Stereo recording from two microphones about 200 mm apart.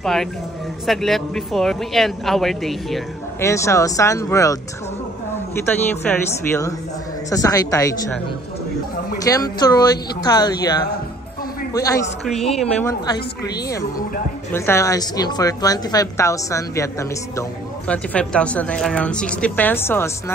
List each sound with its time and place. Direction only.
0.0 s speech: centre (ahead or behind)
3.3 s a woman's voice: 15° left (ahead or behind)
5.7 s a woman's voice: 10° left (ahead or behind)
9.3 s a woman's voice: 15° left (ahead or behind)
12.3 s speech: centre (ahead or behind)
12.8 s a woman's voice: 15° left (ahead or behind)
14.5 s a woman's voice: 15° left (ahead or behind)